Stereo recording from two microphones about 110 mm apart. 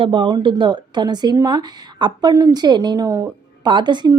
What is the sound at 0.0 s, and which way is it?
Speech, 50° right (ahead or behind).